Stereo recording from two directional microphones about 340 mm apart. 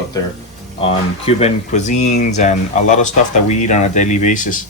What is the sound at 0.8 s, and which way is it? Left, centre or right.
Speech, centre.